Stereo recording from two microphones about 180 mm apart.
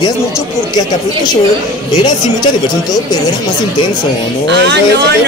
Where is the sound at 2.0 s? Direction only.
20° left (ahead or behind).